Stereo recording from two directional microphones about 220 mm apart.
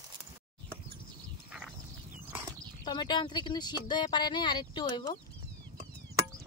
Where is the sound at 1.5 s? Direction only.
5° right (ahead or behind).